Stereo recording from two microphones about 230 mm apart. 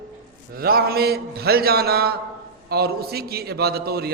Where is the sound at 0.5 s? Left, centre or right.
Right.